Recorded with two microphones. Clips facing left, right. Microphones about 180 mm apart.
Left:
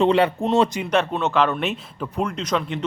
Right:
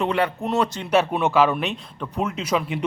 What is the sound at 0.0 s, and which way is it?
Speech, 25° left (ahead or behind).